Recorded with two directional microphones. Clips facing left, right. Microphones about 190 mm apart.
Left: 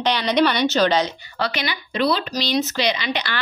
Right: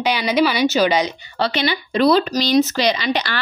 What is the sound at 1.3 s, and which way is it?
Speech, 30° right (ahead or behind).